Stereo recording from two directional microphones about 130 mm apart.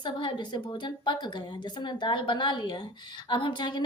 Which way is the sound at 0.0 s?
35° left (ahead or behind).